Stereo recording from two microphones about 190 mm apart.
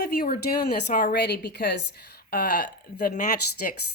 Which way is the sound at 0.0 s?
50° left (ahead or behind).